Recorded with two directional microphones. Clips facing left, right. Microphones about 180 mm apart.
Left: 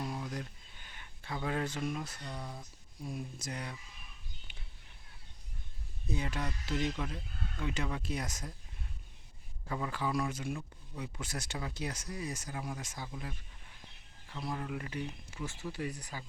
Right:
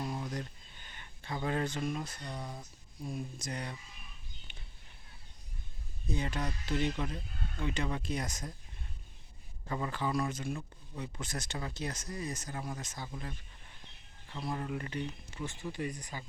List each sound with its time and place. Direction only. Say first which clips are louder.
0.0 s a sound: right 1 dB; centre (ahead or behind)
2.2 s speech: right 1 dB; 10° right (ahead or behind)
3.2 s speech: right 2 dB; 5° left (ahead or behind)
4.5 s whispering: right 1 dB; 5° left (ahead or behind)
6.1 s speech: right 1 dB; 5° left (ahead or behind)
9.6 s speech: right 1 dB; centre (ahead or behind)
14.5 s speech: right 2 dB; centre (ahead or behind)